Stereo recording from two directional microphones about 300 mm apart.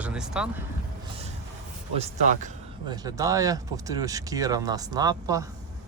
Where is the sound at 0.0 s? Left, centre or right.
Centre.